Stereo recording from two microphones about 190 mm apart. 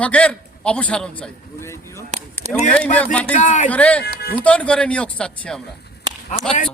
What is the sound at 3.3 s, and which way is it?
Speech, 40° left (ahead or behind).